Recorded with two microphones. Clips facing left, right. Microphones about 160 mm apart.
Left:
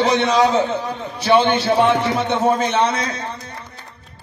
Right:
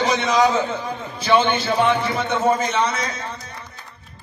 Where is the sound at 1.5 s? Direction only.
75° left (ahead or behind).